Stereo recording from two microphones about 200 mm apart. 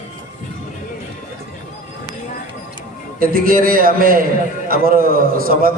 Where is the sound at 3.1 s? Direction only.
45° right (ahead or behind).